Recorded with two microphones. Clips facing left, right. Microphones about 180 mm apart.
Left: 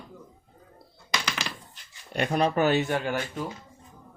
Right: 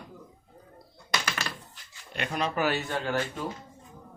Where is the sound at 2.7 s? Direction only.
15° left (ahead or behind).